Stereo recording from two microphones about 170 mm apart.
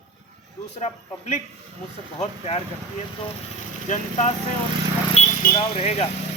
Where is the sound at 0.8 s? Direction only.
40° left (ahead or behind).